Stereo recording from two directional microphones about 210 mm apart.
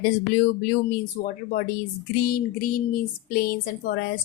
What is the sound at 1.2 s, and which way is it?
A woman's voice, 40° left (ahead or behind).